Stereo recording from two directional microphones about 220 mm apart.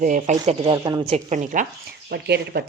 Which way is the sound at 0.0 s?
35° right (ahead or behind).